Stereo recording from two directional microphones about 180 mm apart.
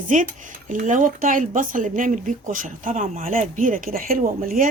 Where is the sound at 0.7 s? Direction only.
45° right (ahead or behind).